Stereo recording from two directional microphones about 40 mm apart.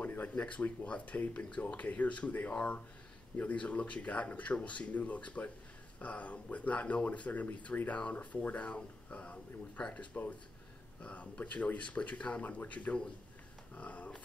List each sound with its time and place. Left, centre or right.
0.2 s speech: left